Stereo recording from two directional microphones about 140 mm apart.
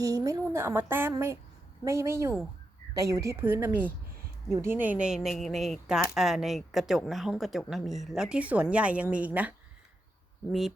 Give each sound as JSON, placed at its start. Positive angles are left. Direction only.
{"t": 0.0, "sound": "a woman's voice", "side_deg": -25}